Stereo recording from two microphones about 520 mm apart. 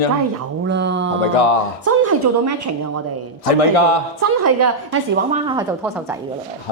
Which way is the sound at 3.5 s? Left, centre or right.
Left.